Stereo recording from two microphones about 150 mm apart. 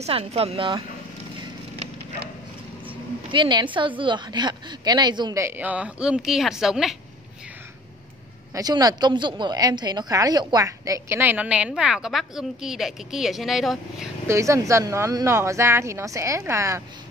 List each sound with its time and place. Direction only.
0.0 s speech: 45° right (ahead or behind)
3.3 s speech: 30° right (ahead or behind)
5.4 s a woman's voice: 10° right (ahead or behind)
8.5 s a woman's voice: 25° right (ahead or behind); by 14.0 s centre (ahead or behind)
14.2 s speech: 20° right (ahead or behind)